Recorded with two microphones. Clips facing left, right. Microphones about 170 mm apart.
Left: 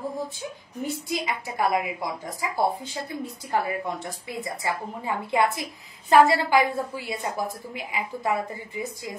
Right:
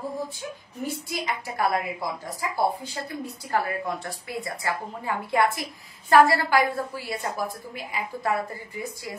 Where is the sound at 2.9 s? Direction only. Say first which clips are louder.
Left 1 dB; 15° left (ahead or behind).